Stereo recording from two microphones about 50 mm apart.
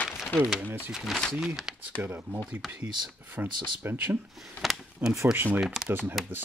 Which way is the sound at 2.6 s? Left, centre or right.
Centre.